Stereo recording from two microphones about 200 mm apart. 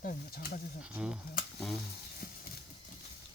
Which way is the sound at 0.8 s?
5° right (ahead or behind).